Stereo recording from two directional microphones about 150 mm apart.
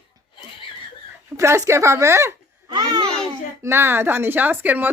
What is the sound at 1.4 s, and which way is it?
Speech, 20° right (ahead or behind).